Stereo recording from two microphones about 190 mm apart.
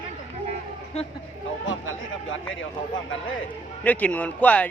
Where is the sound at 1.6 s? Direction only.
90° left.